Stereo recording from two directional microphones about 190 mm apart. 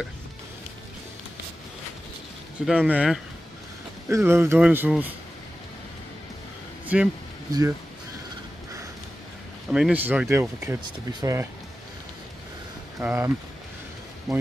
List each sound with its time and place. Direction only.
2.6 s speech: 5° right (ahead or behind)
4.1 s speech: 15° right (ahead or behind)
6.9 s speech: 5° right (ahead or behind)
9.7 s speech: 5° right (ahead or behind)
13.0 s speech: 15° right (ahead or behind)
14.3 s speech: centre (ahead or behind)